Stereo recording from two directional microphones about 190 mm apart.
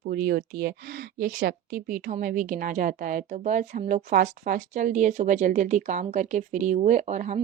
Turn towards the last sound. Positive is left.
turn(degrees=-40)  # may be behind; listen again after turning